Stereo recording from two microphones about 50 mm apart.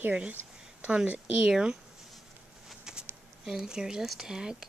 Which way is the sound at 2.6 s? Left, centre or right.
Centre.